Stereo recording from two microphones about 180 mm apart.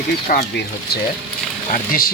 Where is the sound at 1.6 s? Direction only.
50° left (ahead or behind).